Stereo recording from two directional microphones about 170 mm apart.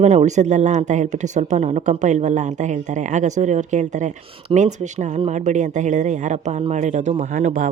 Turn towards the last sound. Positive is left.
turn(degrees=-45)  # may be behind; listen again after turning